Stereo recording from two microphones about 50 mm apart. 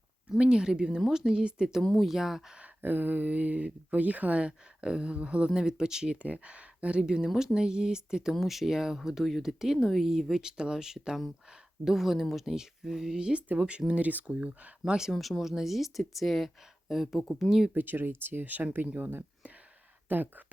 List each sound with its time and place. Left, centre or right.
0.3 s speech: centre
1.8 s speech: centre
2.1 s speech: centre
2.8 s speech: right; by 6.1 s centre
6.2 s speech: right
14.3 s speech: centre
15.1 s speech: centre
17.7 s speech: right
18.4 s speech: right
20.1 s speech: right